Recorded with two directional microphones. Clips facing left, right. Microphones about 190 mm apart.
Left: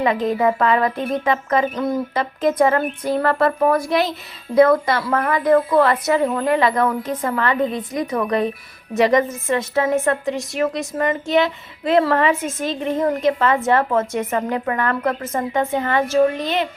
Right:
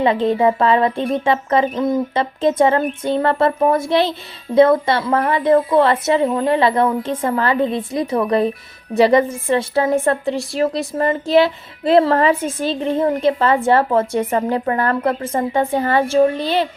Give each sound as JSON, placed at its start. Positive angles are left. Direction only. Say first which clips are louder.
{"t": 0.0, "sound": "a woman's voice", "louder": "right 3 dB", "side_deg": -30}